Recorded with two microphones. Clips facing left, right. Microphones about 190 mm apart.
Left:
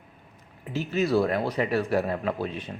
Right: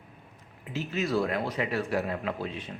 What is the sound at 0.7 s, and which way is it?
A man's voice, 35° left (ahead or behind).